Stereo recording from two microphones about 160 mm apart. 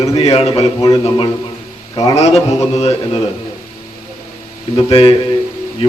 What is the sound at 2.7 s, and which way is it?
Speech, 40° left (ahead or behind).